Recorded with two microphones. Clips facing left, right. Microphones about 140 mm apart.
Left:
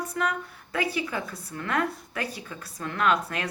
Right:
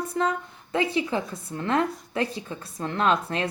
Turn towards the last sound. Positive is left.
turn(degrees=-25)  # may be behind; listen again after turning